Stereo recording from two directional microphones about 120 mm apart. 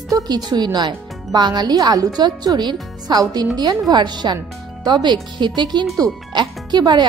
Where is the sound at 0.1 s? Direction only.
35° right (ahead or behind).